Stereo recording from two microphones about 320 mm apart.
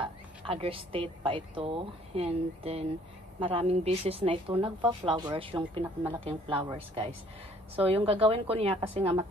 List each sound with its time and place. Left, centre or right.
0.5 s a woman's voice: centre